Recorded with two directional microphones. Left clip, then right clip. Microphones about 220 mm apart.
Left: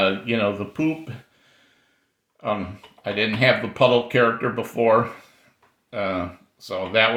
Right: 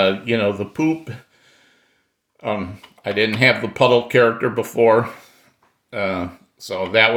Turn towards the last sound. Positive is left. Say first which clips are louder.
# right 4 dB
turn(degrees=-40)  # may be behind; listen again after turning